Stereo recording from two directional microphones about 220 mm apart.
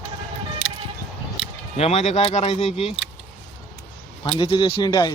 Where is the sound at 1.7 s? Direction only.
30° left (ahead or behind).